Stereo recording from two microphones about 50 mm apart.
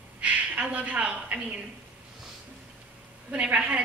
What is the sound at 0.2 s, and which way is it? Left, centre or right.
Speech, right.